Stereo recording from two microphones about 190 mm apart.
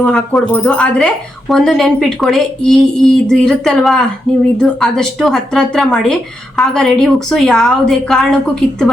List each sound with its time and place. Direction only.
0.0 s a woman's voice: 10° left (ahead or behind)